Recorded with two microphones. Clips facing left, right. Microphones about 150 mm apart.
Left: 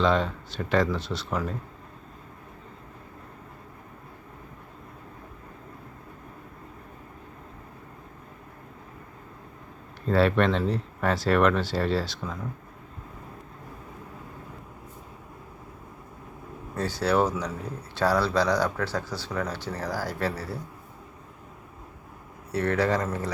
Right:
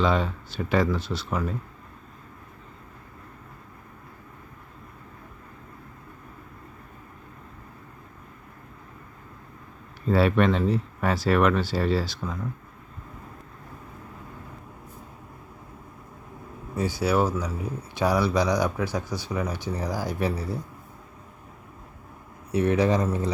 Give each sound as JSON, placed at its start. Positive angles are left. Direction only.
{"t": 0.0, "sound": "speech", "side_deg": -5}
{"t": 10.1, "sound": "speech", "side_deg": -5}
{"t": 16.7, "sound": "speech", "side_deg": -10}
{"t": 22.5, "sound": "speech", "side_deg": -15}